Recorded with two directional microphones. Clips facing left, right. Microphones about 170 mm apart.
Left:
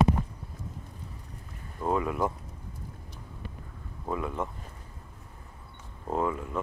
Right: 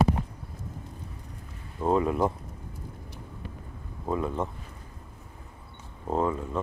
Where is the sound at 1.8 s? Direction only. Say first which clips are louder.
Right 4 dB; 25° right (ahead or behind).